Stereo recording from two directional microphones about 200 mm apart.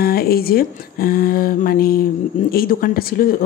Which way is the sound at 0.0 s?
50° left (ahead or behind).